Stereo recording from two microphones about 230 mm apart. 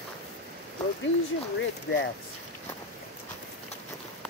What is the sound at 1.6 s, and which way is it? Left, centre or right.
Speech, left.